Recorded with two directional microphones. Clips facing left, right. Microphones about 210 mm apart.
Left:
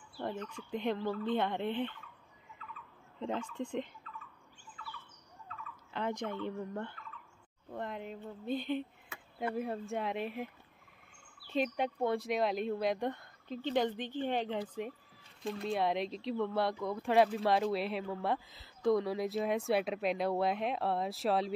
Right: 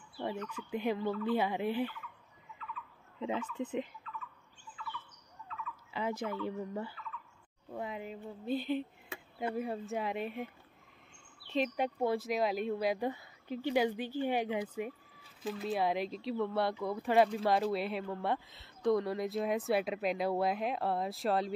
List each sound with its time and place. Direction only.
0.1 s dog: 5° right (ahead or behind)
0.6 s speech: 5° right (ahead or behind)
2.6 s a sound: 40° left (ahead or behind)
3.2 s speech: 5° right (ahead or behind)
4.8 s bird: 40° left (ahead or behind)
5.9 s speech: 5° right (ahead or behind)